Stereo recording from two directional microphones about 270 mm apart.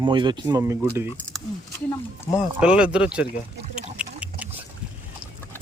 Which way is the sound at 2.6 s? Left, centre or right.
Centre.